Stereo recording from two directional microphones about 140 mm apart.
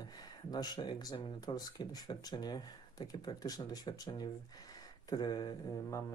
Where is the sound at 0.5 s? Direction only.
30° left (ahead or behind).